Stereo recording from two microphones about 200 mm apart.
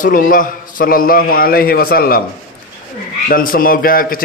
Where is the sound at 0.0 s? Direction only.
40° left (ahead or behind).